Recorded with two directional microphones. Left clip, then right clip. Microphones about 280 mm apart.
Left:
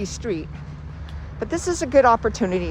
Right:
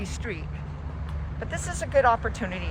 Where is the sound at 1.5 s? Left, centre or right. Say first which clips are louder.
Left 7 dB; centre.